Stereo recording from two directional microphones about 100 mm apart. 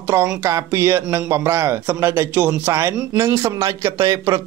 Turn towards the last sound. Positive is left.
turn(degrees=-35)  # may be behind; listen again after turning